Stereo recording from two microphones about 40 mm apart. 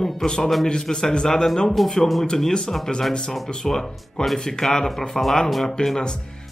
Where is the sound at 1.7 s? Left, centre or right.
Centre.